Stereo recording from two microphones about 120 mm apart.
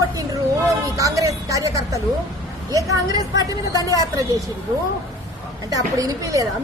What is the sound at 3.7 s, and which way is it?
Speech, 30° left (ahead or behind).